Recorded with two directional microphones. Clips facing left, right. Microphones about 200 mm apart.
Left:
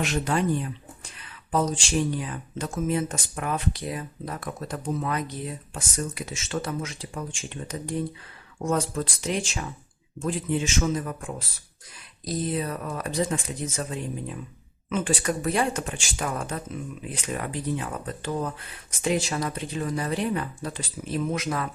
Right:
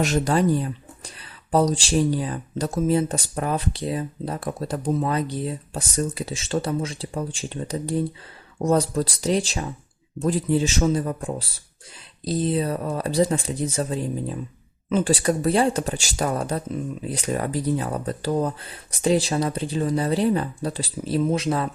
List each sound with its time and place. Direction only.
0.0 s speech: 40° right (ahead or behind)